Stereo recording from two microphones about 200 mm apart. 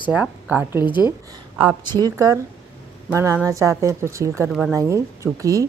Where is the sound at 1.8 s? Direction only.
20° right (ahead or behind).